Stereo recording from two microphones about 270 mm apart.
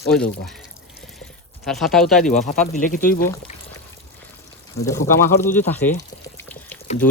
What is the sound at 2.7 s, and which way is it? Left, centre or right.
Speech, left.